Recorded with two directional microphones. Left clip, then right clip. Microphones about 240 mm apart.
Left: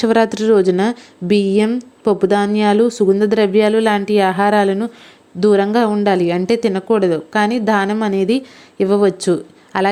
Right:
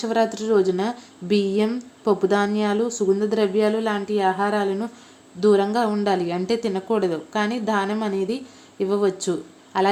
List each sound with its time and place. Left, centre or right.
0.0 s a woman's voice: left